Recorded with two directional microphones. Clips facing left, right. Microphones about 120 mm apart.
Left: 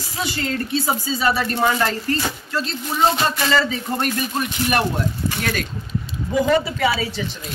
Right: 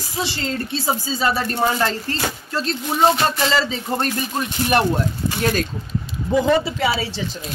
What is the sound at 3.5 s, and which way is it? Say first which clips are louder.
Speech: left 1 dB; 25° right (ahead or behind).